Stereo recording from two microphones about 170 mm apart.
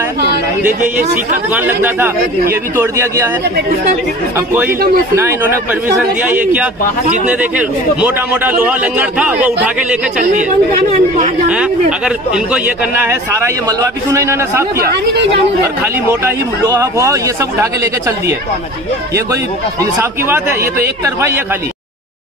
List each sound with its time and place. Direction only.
1.5 s speech: 10° right (ahead or behind)
4.6 s speech: 60° right (ahead or behind)
5.1 s speech: 15° right (ahead or behind)
7.2 s speech: 10° right (ahead or behind)
10.9 s speech: 45° right (ahead or behind)
12.0 s speech: 5° right (ahead or behind)
15.8 s speech: 15° right (ahead or behind)
20.0 s speech: 15° right (ahead or behind)